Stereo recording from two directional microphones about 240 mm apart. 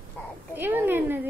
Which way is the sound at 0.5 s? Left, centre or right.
Centre.